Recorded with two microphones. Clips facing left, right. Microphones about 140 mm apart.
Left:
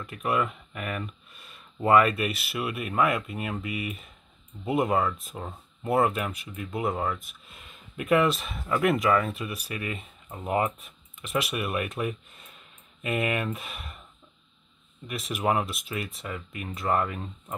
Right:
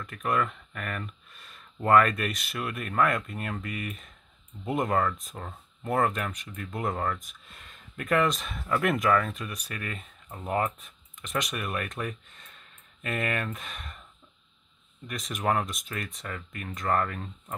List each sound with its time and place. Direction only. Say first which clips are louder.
0.0 s speech: left 1 dB; 10° left (ahead or behind)
15.0 s speech: left 2 dB; 5° left (ahead or behind)